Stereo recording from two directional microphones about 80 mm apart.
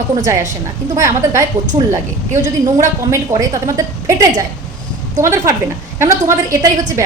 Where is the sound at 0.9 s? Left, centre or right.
Right.